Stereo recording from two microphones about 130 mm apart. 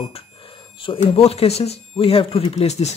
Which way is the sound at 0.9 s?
50° left (ahead or behind).